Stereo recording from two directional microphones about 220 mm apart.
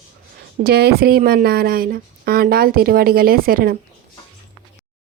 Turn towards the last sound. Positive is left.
turn(degrees=-40)  # may be behind; listen again after turning